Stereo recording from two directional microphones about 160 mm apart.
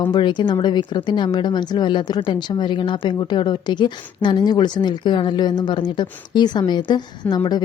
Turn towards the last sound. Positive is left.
turn(degrees=25)  # may be behind; listen again after turning